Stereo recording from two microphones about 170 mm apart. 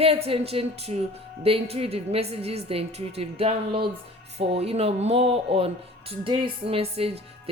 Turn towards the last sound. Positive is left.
turn(degrees=-35)  # may be behind; listen again after turning